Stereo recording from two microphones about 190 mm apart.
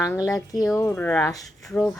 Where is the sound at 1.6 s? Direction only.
Centre (ahead or behind).